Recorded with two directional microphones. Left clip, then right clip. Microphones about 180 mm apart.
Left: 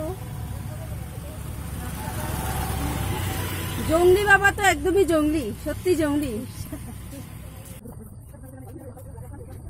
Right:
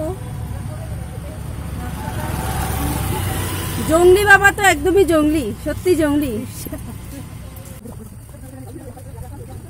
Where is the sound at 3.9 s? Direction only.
10° right (ahead or behind).